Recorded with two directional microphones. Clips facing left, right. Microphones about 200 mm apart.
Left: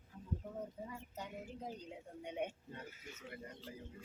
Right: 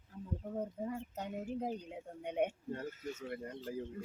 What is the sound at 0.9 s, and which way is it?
A woman's voice, 55° right (ahead or behind).